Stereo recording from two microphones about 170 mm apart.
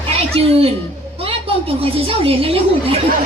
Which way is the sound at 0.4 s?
35° right (ahead or behind).